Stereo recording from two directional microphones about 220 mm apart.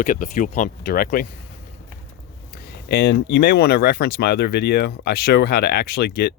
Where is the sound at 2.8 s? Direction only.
50° left (ahead or behind).